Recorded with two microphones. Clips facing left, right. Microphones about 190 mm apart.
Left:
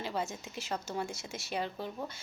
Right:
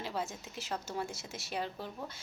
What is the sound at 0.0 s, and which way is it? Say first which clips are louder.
Speech: left 2 dB; centre (ahead or behind).